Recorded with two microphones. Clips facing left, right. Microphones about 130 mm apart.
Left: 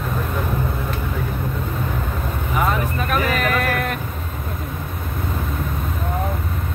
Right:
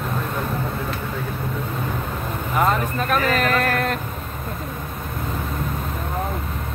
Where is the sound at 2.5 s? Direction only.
5° left (ahead or behind).